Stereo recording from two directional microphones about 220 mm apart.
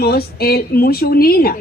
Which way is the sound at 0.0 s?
45° left (ahead or behind).